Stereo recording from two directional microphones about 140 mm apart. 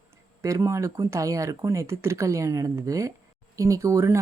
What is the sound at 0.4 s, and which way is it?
Speech, 20° right (ahead or behind).